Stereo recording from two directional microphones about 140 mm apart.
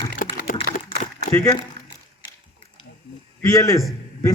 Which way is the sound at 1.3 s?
20° left (ahead or behind).